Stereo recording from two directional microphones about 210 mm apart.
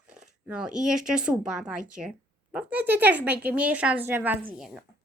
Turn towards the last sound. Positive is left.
turn(degrees=-10)  # may be behind; listen again after turning